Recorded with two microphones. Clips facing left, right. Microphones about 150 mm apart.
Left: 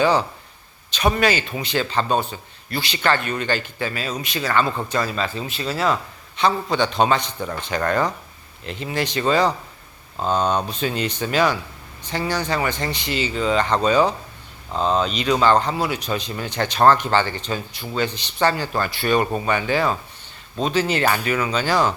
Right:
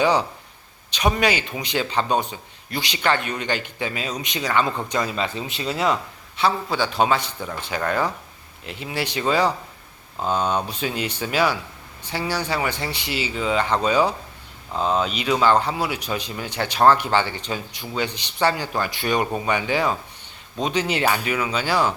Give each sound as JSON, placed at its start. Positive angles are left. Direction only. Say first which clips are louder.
{"t": 0.0, "sound": "speech", "louder": "left 1 dB", "side_deg": -15}
{"t": 6.3, "sound": "speech", "louder": "left 2 dB", "side_deg": -5}